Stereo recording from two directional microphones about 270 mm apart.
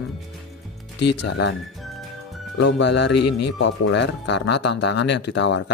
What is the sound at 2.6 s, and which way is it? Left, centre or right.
Speech, left.